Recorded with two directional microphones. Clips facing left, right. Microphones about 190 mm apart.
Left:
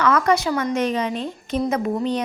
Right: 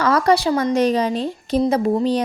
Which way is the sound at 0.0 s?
35° right (ahead or behind).